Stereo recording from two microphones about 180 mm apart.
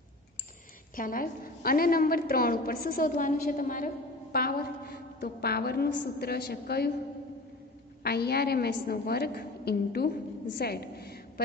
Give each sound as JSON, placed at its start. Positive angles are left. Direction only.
{"t": 0.9, "sound": "a woman's voice", "side_deg": 50}
{"t": 8.0, "sound": "a woman's voice", "side_deg": 60}